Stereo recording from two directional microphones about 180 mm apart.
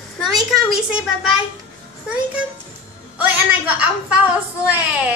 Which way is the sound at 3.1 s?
10° right (ahead or behind).